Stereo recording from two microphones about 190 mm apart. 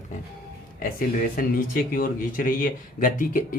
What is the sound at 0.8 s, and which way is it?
Speech, 45° left (ahead or behind).